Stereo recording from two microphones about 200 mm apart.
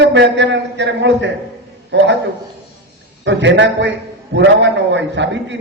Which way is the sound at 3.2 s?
65° right (ahead or behind).